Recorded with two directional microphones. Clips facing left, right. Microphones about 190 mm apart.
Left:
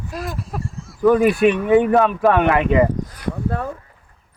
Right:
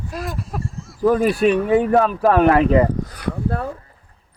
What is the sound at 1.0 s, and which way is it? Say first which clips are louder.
Speech: left 2 dB; 35° right (ahead or behind).